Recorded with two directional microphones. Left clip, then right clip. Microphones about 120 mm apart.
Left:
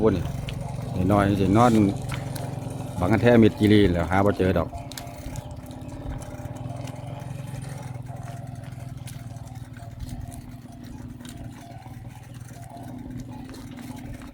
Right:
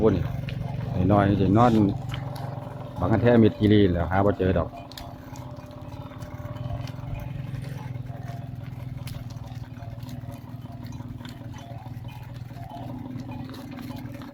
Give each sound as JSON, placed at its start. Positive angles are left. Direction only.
{"t": 0.0, "sound": "vehicle", "side_deg": 30}
{"t": 0.9, "sound": "speech", "side_deg": 25}
{"t": 1.8, "sound": "a sound", "side_deg": 40}
{"t": 3.0, "sound": "speech", "side_deg": 45}